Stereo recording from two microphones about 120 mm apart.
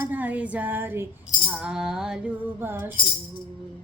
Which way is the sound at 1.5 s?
5° right (ahead or behind).